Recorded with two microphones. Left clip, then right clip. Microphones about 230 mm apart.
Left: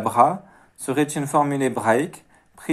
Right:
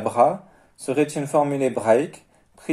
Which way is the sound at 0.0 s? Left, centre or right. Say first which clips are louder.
Left 1 dB; centre.